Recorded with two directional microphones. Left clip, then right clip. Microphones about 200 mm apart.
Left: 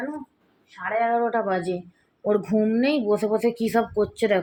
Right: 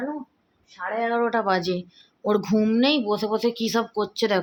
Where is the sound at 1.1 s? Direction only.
15° right (ahead or behind).